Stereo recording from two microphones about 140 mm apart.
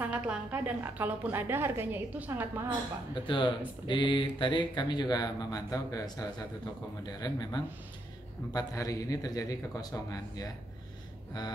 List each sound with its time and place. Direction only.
0.0 s a woman's voice: 10° right (ahead or behind)
3.3 s a man's voice: 35° left (ahead or behind)